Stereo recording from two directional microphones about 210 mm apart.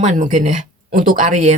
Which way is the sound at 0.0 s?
35° right (ahead or behind).